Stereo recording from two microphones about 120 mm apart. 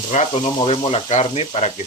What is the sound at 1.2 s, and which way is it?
Speech, 55° left (ahead or behind).